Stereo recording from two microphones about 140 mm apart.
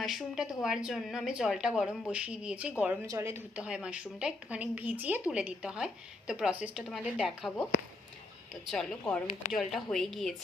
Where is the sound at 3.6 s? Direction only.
5° right (ahead or behind).